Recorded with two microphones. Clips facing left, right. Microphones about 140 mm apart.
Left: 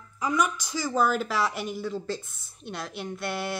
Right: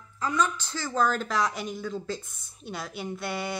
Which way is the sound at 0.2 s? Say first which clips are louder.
Left 1 dB; 15° left (ahead or behind).